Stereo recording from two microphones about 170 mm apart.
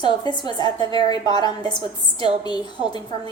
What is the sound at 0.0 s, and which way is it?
A woman's voice, 25° left (ahead or behind).